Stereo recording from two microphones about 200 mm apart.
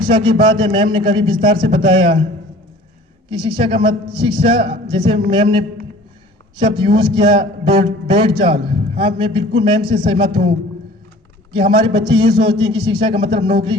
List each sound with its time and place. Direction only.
0.0 s a man's voice: 25° right (ahead or behind)
3.2 s a man's voice: 25° right (ahead or behind)
11.5 s a man's voice: 25° right (ahead or behind)